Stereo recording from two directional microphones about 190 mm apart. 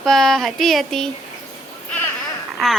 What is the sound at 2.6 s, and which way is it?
Speech, centre (ahead or behind).